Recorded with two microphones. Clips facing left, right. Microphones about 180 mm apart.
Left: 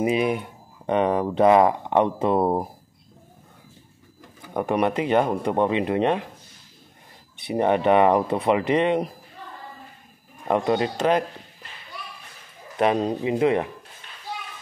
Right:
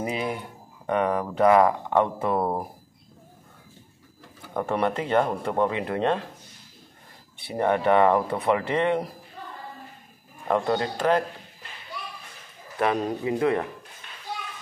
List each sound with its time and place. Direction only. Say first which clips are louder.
0.0 s speech: left 7 dB; 15° left (ahead or behind)
4.6 s speech: left 3 dB; 15° left (ahead or behind)
7.3 s speech: left 3 dB; 20° left (ahead or behind)
10.5 s speech: left 2 dB; 20° left (ahead or behind)
12.7 s speech: left 3 dB; 20° left (ahead or behind)